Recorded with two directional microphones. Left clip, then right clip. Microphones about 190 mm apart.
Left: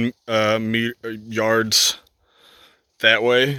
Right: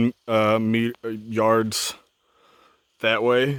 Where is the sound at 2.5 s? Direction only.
10° right (ahead or behind).